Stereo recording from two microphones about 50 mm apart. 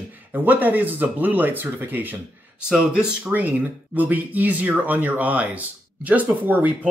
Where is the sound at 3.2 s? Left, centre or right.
Right.